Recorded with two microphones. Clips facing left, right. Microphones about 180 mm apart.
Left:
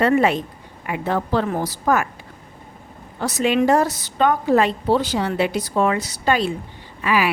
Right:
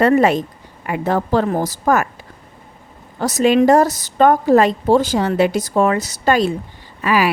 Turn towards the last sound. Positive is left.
turn(degrees=-40)  # may be behind; listen again after turning